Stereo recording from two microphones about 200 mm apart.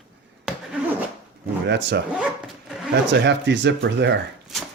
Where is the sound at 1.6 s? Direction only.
60° right (ahead or behind).